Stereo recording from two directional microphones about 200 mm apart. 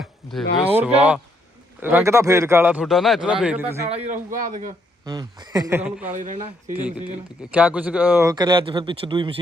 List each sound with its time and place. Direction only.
0.0 s a sound: centre (ahead or behind)
0.7 s a man's voice: 10° right (ahead or behind)
3.8 s speech: 35° right (ahead or behind)
5.0 s a man's voice: 20° right (ahead or behind)
6.1 s speech: 40° right (ahead or behind)
7.5 s speech: 5° right (ahead or behind); by 9.3 s 25° right (ahead or behind)